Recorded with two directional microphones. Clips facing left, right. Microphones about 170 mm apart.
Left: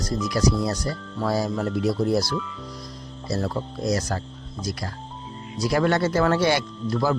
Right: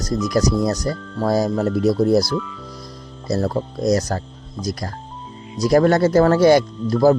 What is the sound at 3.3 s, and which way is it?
Speech, 40° right (ahead or behind).